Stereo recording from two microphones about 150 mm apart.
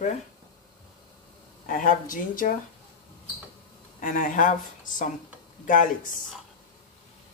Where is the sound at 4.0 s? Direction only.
60° left (ahead or behind).